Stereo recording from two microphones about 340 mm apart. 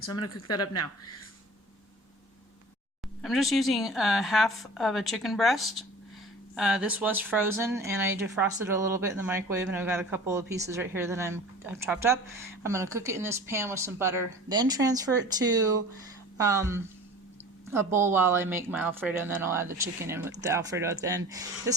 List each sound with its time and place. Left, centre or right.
0.0 s speech: left
3.2 s a woman's voice: centre